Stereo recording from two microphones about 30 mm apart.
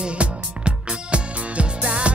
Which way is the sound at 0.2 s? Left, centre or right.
Right.